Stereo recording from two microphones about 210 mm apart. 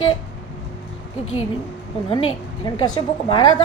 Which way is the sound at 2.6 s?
25° left (ahead or behind).